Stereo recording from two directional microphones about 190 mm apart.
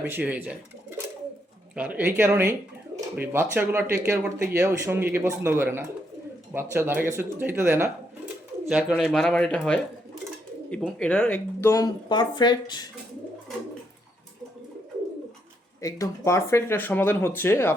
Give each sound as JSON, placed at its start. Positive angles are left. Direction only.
{"t": 0.1, "sound": "speech", "side_deg": -10}
{"t": 15.8, "sound": "speech", "side_deg": 15}